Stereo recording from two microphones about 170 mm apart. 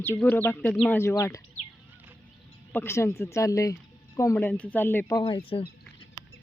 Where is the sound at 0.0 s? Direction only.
10° left (ahead or behind).